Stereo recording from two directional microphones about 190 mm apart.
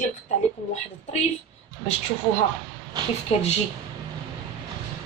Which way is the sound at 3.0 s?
20° right (ahead or behind).